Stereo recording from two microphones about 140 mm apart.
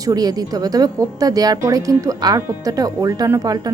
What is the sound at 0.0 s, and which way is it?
Speech, 25° right (ahead or behind).